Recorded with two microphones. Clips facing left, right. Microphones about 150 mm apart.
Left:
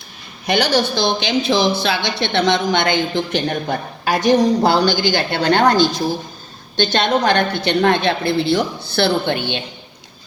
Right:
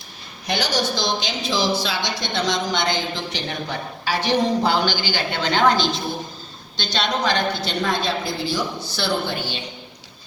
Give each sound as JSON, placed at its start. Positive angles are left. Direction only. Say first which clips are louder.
{"t": 0.4, "sound": "a woman's voice", "louder": "left 6 dB", "side_deg": 65}